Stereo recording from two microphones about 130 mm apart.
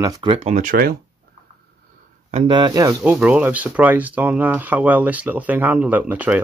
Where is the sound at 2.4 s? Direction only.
35° right (ahead or behind).